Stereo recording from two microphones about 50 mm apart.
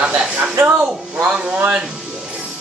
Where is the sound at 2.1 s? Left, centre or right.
Right.